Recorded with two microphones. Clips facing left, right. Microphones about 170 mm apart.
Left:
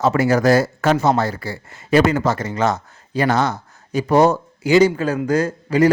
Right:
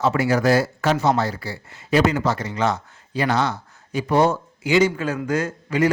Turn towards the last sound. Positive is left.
turn(degrees=35)  # may be behind; listen again after turning